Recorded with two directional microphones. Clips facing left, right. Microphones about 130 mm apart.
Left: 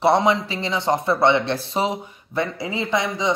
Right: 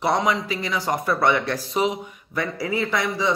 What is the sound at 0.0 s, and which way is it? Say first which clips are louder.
Speech: left 4 dB; 30° left (ahead or behind).